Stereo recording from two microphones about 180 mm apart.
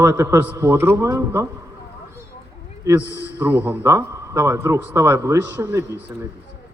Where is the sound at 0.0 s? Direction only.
15° right (ahead or behind).